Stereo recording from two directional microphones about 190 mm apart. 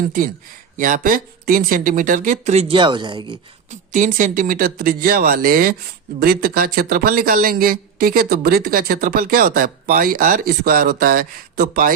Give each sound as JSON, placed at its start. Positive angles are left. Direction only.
{"t": 0.8, "sound": "speech", "side_deg": -45}
{"t": 3.7, "sound": "speech", "side_deg": -40}